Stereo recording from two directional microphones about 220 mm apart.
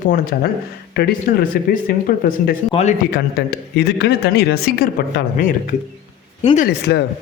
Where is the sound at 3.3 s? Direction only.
45° left (ahead or behind); by 6.7 s 30° left (ahead or behind).